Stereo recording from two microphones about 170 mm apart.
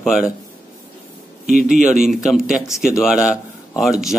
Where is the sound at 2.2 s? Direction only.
5° right (ahead or behind).